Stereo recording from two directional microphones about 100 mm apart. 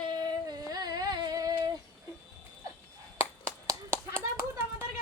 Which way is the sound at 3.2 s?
30° right (ahead or behind).